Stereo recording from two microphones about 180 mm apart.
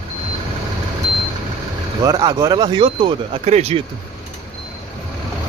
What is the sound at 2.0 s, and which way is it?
Speech, 20° right (ahead or behind).